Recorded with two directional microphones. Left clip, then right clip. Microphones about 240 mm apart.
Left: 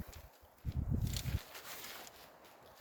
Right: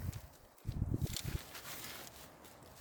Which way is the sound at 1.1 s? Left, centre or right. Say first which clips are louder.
Even; centre.